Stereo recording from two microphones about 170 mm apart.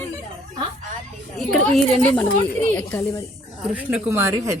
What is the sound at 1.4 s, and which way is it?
Speech, centre (ahead or behind).